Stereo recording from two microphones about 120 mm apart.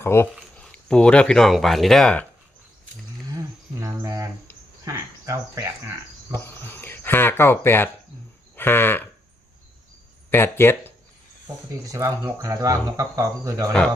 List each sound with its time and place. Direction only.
0.0 s speech: 20° left (ahead or behind)
0.5 s speech: 5° left (ahead or behind)
3.3 s cricket: 30° right (ahead or behind)
4.9 s speech: 30° right (ahead or behind)
6.3 s speech: 20° left (ahead or behind)
8.5 s livestock: 20° left (ahead or behind)
10.2 s speech: 20° left (ahead or behind)
11.9 s speech: 25° right (ahead or behind)